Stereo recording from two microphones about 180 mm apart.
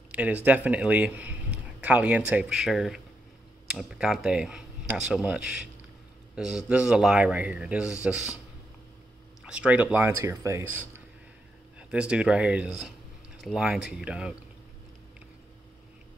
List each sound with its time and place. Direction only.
0.1 s speech: 10° right (ahead or behind)
9.5 s speech: 5° right (ahead or behind)